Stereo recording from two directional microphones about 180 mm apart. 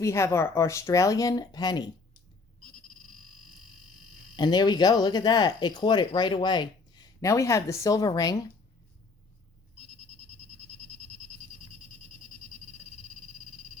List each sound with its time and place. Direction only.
0.0 s speech: 15° left (ahead or behind)
4.4 s speech: 25° left (ahead or behind)